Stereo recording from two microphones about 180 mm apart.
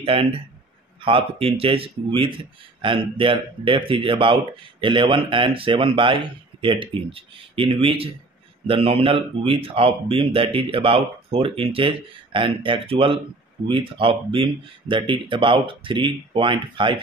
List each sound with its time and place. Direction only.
0.0 s speech: 30° right (ahead or behind)